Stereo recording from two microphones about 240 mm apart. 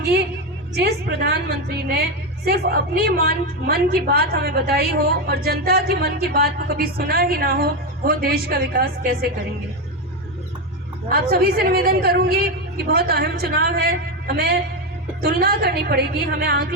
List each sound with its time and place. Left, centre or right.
0.8 s a woman's voice: right
2.5 s a woman's voice: right
11.1 s a woman's voice: right